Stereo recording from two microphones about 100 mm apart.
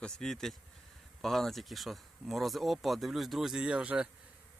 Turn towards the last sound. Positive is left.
turn(degrees=-10)  # may be behind; listen again after turning